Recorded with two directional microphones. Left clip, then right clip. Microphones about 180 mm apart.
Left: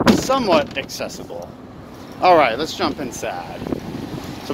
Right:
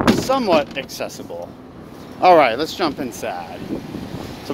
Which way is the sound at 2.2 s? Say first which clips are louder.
Right 1 dB; 45° right (ahead or behind).